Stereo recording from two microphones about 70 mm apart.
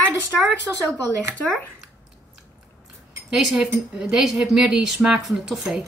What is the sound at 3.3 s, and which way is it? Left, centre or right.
Speech, centre.